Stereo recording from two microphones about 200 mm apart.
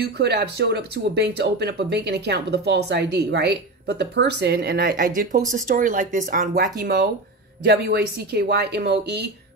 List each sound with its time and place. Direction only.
0.0 s speech: 55° right (ahead or behind)
7.6 s speech: 55° right (ahead or behind)